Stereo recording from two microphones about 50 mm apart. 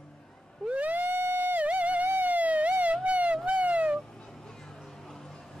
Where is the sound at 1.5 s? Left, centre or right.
Right.